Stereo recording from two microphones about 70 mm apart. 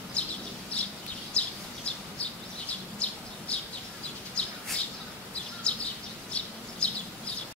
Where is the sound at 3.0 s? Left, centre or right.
Centre.